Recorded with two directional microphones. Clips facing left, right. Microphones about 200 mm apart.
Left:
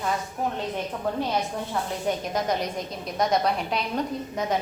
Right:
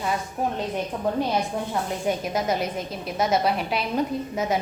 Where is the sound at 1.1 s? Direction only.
15° right (ahead or behind).